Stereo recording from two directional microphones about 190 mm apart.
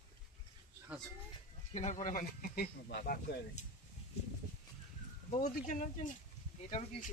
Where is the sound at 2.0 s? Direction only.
45° left (ahead or behind).